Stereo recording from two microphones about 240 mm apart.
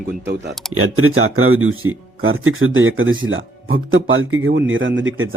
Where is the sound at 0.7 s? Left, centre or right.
Right.